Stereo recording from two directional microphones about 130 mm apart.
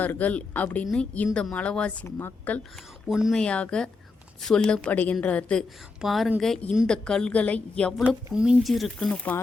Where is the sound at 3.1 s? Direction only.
5° right (ahead or behind).